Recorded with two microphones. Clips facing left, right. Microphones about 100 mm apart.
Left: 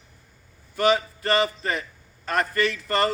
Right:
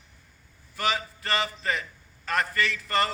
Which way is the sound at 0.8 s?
30° left (ahead or behind).